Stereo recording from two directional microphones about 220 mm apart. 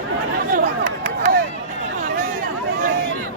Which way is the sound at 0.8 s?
40° right (ahead or behind).